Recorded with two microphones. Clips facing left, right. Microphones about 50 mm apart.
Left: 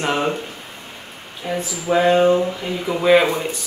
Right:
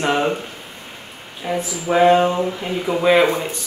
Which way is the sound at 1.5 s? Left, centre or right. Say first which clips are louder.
Even; centre.